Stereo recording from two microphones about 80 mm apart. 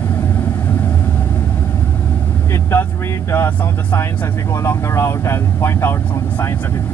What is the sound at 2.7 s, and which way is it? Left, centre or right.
Speech, left.